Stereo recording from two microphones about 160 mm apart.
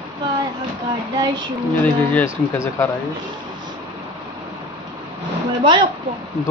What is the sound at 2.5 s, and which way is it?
Speech, 20° left (ahead or behind).